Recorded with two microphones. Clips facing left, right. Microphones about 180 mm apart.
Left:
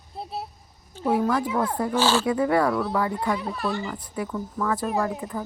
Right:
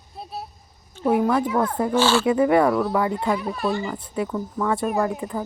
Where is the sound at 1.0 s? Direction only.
20° right (ahead or behind).